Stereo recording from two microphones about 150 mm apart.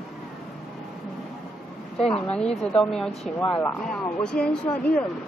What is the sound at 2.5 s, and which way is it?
Speech, 45° left (ahead or behind).